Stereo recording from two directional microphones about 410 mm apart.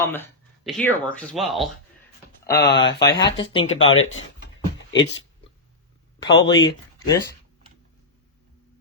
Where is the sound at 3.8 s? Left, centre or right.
Left.